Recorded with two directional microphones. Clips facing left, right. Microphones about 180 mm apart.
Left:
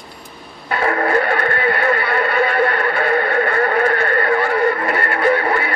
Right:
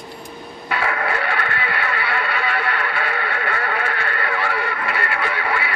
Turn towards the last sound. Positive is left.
turn(degrees=45)  # may be behind; listen again after turning